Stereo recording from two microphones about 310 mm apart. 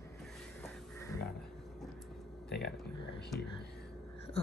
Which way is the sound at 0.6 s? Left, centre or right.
Centre.